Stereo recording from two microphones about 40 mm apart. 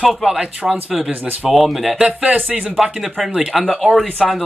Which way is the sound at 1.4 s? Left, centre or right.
Centre.